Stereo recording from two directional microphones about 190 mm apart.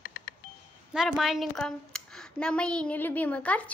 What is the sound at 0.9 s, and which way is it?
A woman's voice, centre (ahead or behind).